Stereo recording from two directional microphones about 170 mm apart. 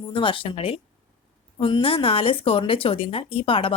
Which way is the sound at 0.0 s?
30° left (ahead or behind).